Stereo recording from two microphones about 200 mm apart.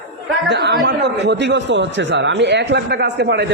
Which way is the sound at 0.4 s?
55° right (ahead or behind).